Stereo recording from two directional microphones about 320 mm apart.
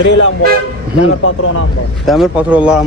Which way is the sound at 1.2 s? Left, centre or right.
Left.